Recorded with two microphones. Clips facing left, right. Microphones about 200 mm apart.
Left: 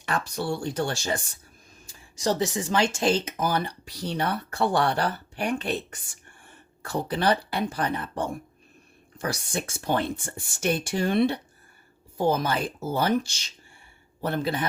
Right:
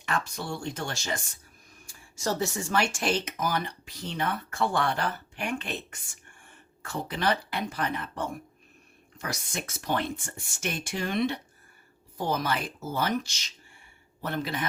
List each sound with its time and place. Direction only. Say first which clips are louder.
0.0 s speech: left 3 dB; 35° left (ahead or behind)
1.9 s a woman's voice: left 4 dB; 15° left (ahead or behind)